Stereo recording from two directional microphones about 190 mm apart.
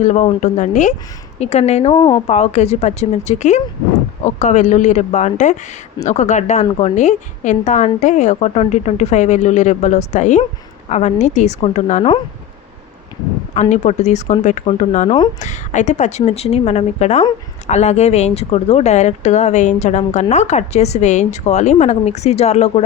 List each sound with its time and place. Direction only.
0.0 s a woman's voice: 35° left (ahead or behind)
13.5 s a woman's voice: 40° left (ahead or behind)